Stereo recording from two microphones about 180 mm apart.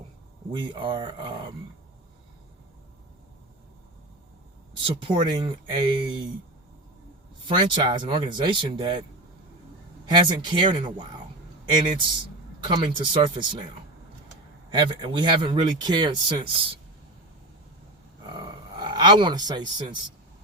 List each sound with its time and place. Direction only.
0.5 s speech: 25° right (ahead or behind)
5.0 s speech: 25° right (ahead or behind)
7.4 s speech: 25° right (ahead or behind)
10.1 s speech: 25° right (ahead or behind)
14.7 s speech: 25° right (ahead or behind)
18.3 s a sound: 25° right (ahead or behind)